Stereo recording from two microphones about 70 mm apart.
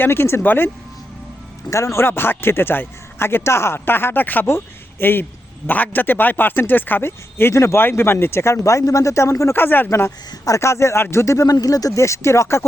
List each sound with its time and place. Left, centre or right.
0.0 s speech: left
1.7 s speech: left
9.6 s speech: left
9.9 s speech: left
11.4 s speech: left